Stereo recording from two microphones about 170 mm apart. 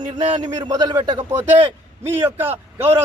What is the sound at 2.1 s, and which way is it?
Speech, 15° right (ahead or behind).